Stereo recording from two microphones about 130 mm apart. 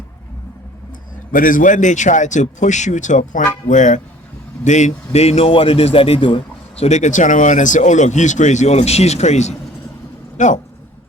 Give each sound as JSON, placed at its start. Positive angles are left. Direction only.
{"t": 1.3, "sound": "a man's voice", "side_deg": 90}
{"t": 6.8, "sound": "speech", "side_deg": 65}
{"t": 10.3, "sound": "speech", "side_deg": 70}